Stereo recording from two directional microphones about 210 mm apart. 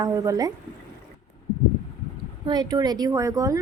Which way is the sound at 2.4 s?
20° right (ahead or behind).